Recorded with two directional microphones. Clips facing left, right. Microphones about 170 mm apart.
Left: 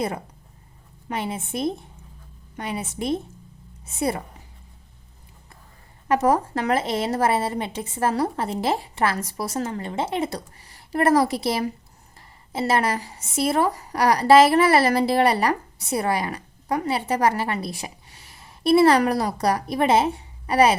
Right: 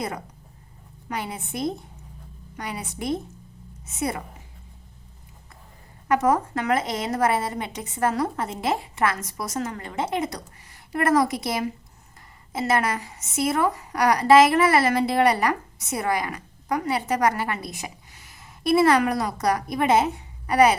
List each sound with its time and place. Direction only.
1.0 s a woman's voice: 25° left (ahead or behind)
6.1 s a woman's voice: 30° left (ahead or behind)